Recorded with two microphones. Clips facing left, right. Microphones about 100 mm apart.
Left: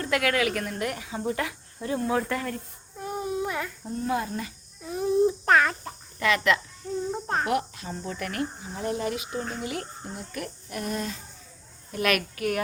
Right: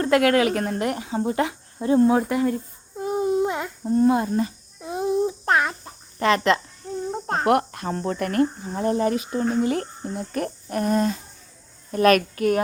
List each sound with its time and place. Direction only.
0.0 s speech: 35° right (ahead or behind)
3.0 s a sound: 20° right (ahead or behind)
3.9 s speech: 35° right (ahead or behind)
4.8 s a sound: 20° right (ahead or behind)
6.1 s speech: 35° right (ahead or behind)
7.4 s a woman's voice: 55° right (ahead or behind); by 12.6 s 35° right (ahead or behind)